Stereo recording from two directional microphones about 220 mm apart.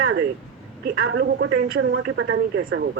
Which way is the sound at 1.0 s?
60° right (ahead or behind).